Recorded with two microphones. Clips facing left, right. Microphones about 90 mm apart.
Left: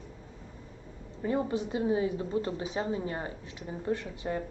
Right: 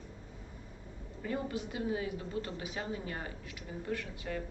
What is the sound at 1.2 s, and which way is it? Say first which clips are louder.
A woman's voice: left 7 dB; 30° left (ahead or behind).